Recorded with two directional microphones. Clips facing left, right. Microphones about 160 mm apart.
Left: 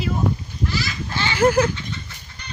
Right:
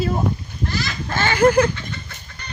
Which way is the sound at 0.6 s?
50° right (ahead or behind).